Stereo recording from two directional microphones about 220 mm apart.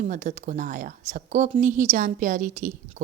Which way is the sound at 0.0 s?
35° right (ahead or behind).